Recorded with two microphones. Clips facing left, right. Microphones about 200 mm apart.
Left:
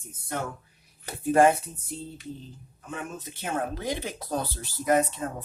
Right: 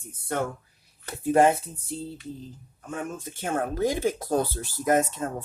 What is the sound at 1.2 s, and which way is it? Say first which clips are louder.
Speech: even; 25° right (ahead or behind).